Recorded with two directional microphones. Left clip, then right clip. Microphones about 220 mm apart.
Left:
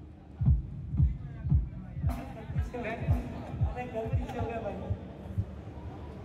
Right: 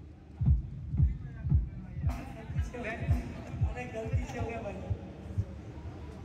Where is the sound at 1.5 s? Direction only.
45° left (ahead or behind).